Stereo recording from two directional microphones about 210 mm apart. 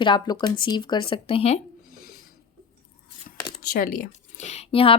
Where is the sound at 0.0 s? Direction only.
20° left (ahead or behind).